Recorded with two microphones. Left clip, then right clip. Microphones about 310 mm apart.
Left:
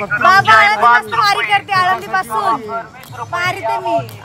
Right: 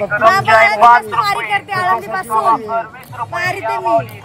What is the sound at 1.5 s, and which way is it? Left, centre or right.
Speech, centre.